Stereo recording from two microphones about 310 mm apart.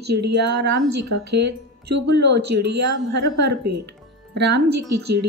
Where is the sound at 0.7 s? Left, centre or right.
Right.